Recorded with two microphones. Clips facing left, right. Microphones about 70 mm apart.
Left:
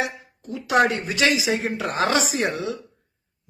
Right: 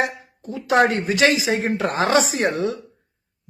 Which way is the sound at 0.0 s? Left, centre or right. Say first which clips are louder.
Right 4 dB; right.